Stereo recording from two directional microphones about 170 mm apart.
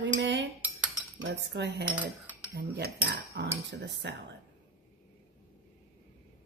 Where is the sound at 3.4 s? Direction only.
90° right.